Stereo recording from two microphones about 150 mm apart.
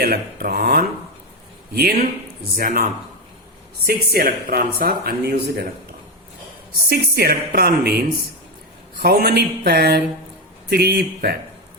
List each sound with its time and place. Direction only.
0.0 s speech: 85° right
2.6 s speech: 70° right (ahead or behind)
3.8 s speech: 85° right
6.9 s speech: 90° right